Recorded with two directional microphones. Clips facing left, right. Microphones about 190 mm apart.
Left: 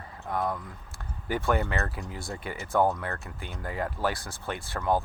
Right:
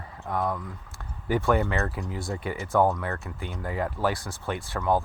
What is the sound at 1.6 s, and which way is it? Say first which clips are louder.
Speech: right 3 dB; 20° right (ahead or behind).